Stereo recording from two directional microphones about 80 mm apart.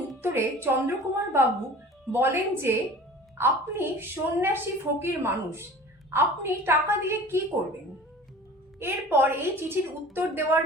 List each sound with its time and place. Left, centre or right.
0.2 s a woman's voice: right
8.8 s a woman's voice: right